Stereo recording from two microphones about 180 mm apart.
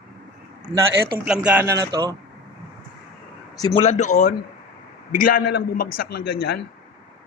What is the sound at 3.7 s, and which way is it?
A man's voice, 35° left (ahead or behind).